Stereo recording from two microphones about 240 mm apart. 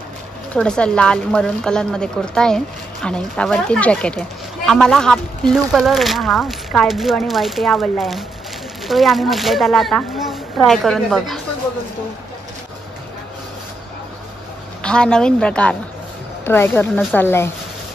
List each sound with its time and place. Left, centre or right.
0.6 s speech: centre
14.8 s a woman's voice: centre